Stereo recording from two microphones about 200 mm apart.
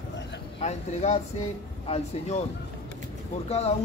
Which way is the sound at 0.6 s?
35° left (ahead or behind).